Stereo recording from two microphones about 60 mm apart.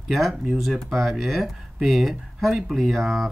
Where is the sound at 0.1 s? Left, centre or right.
Centre.